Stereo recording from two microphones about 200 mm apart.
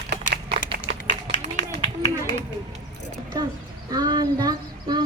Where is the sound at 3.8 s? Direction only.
20° right (ahead or behind).